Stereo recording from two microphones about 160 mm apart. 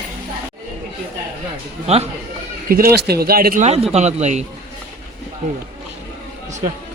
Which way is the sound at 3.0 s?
80° right.